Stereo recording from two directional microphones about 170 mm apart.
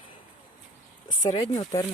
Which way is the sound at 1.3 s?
25° left (ahead or behind).